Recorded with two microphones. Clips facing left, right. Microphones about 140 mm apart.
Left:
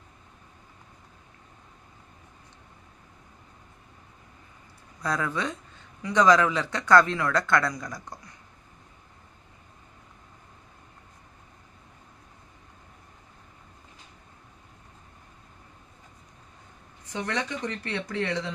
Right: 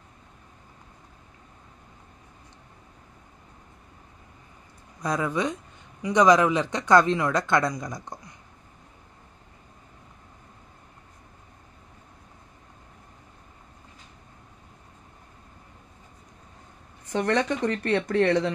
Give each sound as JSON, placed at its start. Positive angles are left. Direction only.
{"t": 5.0, "sound": "speech", "side_deg": -15}
{"t": 17.1, "sound": "speech", "side_deg": -55}